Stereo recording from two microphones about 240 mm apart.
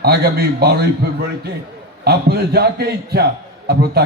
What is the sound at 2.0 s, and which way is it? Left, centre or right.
A man's voice, right.